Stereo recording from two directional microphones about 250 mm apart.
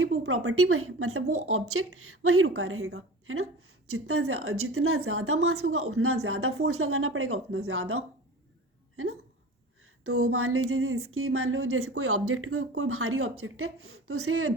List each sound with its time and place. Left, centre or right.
0.0 s a woman's voice: right
10.0 s a woman's voice: right